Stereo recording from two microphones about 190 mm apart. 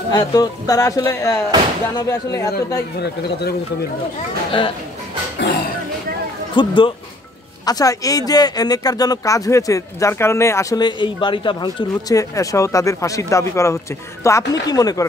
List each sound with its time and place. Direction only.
0.1 s speech: 20° left (ahead or behind)
3.0 s speech: 60° left (ahead or behind)
4.5 s speech: 25° left (ahead or behind)
6.5 s speech: 25° left (ahead or behind)